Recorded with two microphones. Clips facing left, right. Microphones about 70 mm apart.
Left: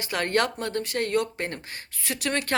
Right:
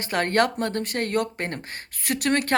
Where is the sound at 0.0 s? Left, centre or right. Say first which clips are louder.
Right 3 dB; right.